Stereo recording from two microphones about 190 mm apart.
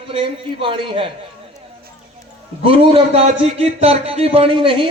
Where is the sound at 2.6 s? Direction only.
30° right (ahead or behind).